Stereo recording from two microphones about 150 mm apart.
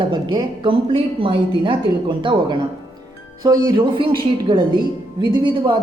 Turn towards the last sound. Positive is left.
turn(degrees=-30)  # may be behind; listen again after turning